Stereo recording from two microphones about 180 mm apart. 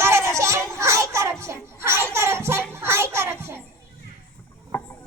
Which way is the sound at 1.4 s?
15° right (ahead or behind).